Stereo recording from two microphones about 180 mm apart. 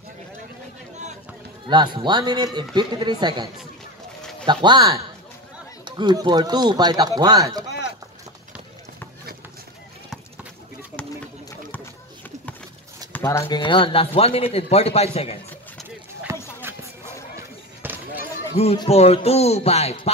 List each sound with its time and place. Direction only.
1.7 s a man's voice: 25° right (ahead or behind)
4.2 s a sound: 5° left (ahead or behind)
4.5 s a man's voice: 25° right (ahead or behind)
13.1 s speech: 15° left (ahead or behind)
13.6 s speech: 25° left (ahead or behind)
16.3 s a sound: 15° right (ahead or behind)
16.6 s basketball bounce: 15° right (ahead or behind)
18.6 s speech: 35° left (ahead or behind)